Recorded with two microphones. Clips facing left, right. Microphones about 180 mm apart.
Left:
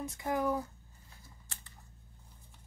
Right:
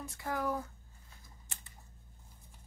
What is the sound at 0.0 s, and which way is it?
Speech, 20° left (ahead or behind).